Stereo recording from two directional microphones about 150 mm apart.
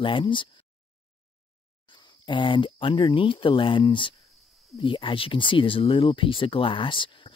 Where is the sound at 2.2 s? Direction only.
30° left (ahead or behind).